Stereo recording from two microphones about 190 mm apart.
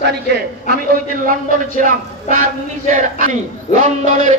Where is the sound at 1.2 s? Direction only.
45° right (ahead or behind).